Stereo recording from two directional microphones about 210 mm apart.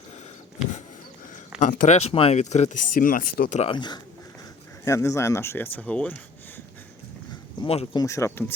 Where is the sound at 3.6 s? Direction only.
25° left (ahead or behind); by 6.6 s 5° left (ahead or behind).